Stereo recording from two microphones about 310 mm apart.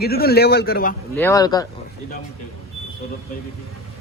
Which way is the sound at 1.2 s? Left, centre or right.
Centre.